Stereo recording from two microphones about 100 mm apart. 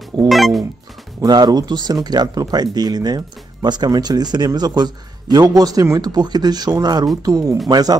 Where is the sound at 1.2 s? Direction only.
45° right (ahead or behind).